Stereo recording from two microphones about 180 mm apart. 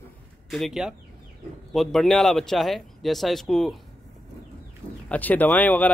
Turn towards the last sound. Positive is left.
turn(degrees=10)  # may be behind; listen again after turning